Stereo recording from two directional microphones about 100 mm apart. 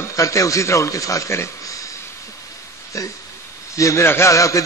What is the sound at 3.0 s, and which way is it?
A man's voice, 35° left (ahead or behind).